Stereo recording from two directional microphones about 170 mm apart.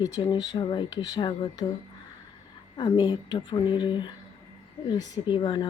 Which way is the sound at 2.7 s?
25° left (ahead or behind).